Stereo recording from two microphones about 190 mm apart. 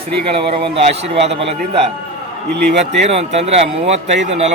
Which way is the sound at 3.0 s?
35° right (ahead or behind).